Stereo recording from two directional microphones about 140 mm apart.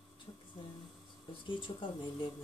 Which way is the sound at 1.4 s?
35° left (ahead or behind).